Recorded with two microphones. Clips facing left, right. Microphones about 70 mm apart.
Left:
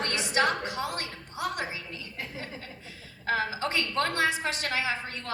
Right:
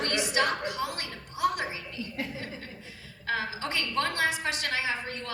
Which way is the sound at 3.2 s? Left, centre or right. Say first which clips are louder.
Left 3 dB; left.